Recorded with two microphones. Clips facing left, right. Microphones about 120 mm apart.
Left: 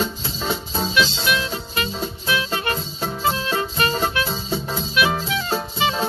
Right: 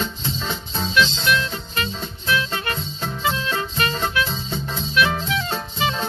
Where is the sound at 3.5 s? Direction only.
10° left (ahead or behind).